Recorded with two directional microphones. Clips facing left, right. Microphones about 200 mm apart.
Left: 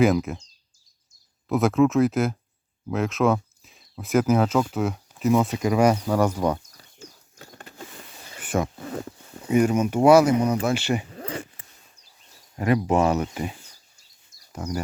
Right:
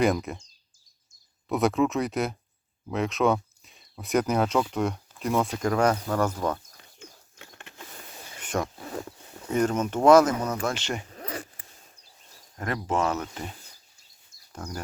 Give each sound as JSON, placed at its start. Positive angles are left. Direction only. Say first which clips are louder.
{"t": 0.0, "sound": "speech", "louder": "left 4 dB", "side_deg": 0}
{"t": 1.5, "sound": "speech", "louder": "left 4 dB", "side_deg": 0}
{"t": 6.7, "sound": "a sound", "louder": "left 3 dB", "side_deg": 40}
{"t": 8.4, "sound": "wild animals", "louder": "left 4 dB", "side_deg": 5}
{"t": 9.5, "sound": "speech", "louder": "left 5 dB", "side_deg": 10}
{"t": 11.1, "sound": "zipper", "louder": "left 3 dB", "side_deg": 30}
{"t": 12.5, "sound": "speech", "louder": "left 7 dB", "side_deg": 15}
{"t": 14.6, "sound": "speech", "louder": "left 7 dB", "side_deg": 10}